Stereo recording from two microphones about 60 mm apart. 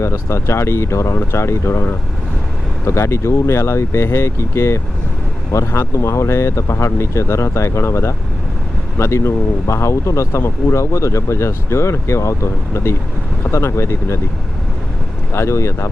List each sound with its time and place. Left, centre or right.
0.0 s speech: left
15.4 s speech: left